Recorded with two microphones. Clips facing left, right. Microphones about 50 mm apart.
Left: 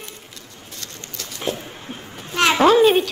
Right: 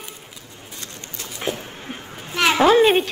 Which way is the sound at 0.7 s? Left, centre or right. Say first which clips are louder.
Even; right.